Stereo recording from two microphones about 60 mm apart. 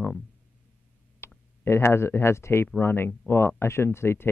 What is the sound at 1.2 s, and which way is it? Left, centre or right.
Clicking, left.